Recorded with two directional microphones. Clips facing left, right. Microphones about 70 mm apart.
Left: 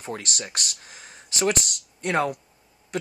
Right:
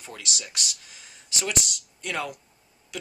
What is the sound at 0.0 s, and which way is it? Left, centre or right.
Speech, left.